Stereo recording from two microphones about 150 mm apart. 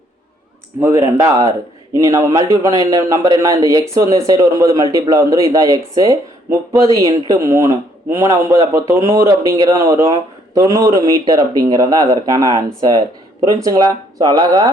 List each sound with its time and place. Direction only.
0.8 s speech: 15° right (ahead or behind)